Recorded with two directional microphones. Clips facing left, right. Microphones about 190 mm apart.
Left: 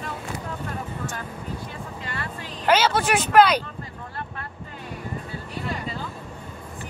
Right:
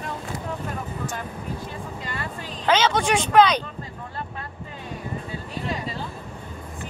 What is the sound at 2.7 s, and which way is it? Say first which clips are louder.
Speech: even; 10° left (ahead or behind).